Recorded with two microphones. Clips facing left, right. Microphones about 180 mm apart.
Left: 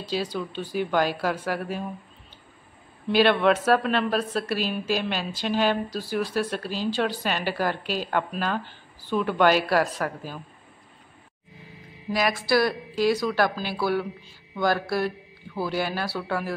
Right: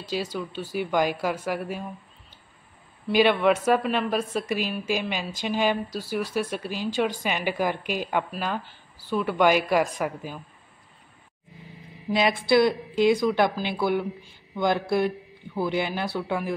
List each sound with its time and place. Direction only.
0.1 s a woman's voice: 10° right (ahead or behind)
3.1 s a woman's voice: 10° right (ahead or behind)
12.1 s speech: 25° right (ahead or behind)